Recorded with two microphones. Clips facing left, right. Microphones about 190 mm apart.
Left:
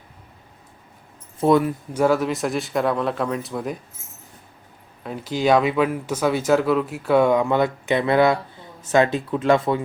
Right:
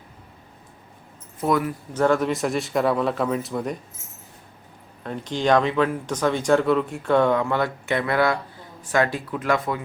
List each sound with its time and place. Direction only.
1.4 s speech: 25° left (ahead or behind)
1.9 s speech: 10° left (ahead or behind)
5.0 s speech: 5° left (ahead or behind); by 9.8 s 25° left (ahead or behind)